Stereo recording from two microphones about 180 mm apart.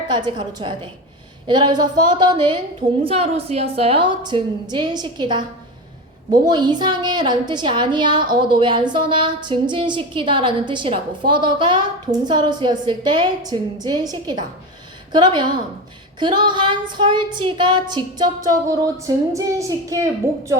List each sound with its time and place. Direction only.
0.1 s a woman's voice: 25° right (ahead or behind)